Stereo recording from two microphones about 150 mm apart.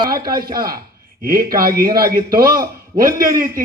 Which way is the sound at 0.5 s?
80° right.